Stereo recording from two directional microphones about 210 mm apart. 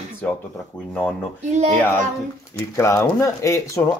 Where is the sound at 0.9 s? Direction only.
10° left (ahead or behind).